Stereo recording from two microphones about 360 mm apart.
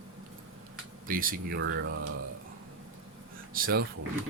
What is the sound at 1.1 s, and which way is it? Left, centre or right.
Speech, right.